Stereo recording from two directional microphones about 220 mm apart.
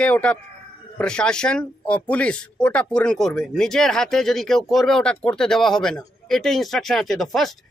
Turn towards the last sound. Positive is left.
turn(degrees=0)  # may be behind; listen again after turning